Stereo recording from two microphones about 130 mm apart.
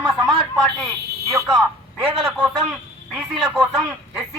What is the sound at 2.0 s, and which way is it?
Speech, 5° right (ahead or behind).